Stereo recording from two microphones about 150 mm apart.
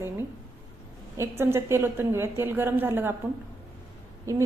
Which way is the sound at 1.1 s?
15° right (ahead or behind).